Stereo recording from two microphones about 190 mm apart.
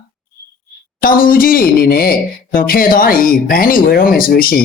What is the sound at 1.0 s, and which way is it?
Speech, 50° left (ahead or behind).